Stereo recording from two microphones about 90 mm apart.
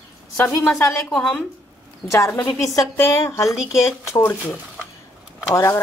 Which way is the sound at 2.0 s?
30° left (ahead or behind).